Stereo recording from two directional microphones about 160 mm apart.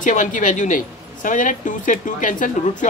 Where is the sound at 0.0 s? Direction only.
55° left (ahead or behind).